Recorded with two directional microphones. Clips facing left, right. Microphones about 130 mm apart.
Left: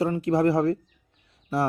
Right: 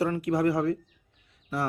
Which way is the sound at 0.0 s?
25° left (ahead or behind).